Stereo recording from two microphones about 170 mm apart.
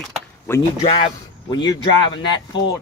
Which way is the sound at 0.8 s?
30° left (ahead or behind).